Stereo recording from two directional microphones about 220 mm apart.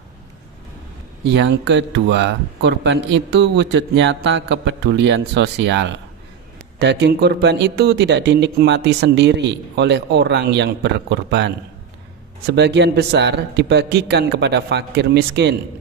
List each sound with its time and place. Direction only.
1.2 s speech: 55° right (ahead or behind)